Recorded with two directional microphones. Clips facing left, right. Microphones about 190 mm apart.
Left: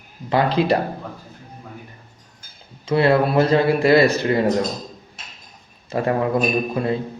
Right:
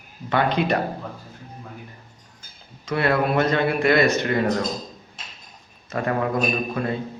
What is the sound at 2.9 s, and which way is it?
Speech, 30° left (ahead or behind).